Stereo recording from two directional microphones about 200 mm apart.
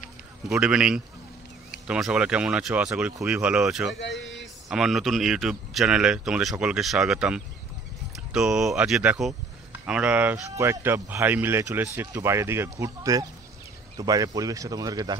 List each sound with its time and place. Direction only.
0.5 s speech: 5° right (ahead or behind)
4.0 s a sound: 60° left (ahead or behind)
4.4 s speech: centre (ahead or behind); by 15.1 s 20° right (ahead or behind)